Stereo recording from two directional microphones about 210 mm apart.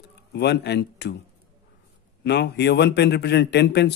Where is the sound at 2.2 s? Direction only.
55° left (ahead or behind).